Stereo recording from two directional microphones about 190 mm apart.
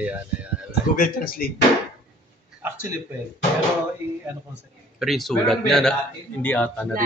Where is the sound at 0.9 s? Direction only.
50° left (ahead or behind).